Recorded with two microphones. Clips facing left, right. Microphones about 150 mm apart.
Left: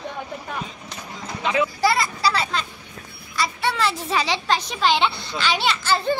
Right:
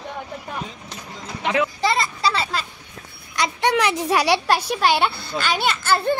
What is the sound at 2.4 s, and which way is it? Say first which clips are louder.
Speech: even; 5° right (ahead or behind).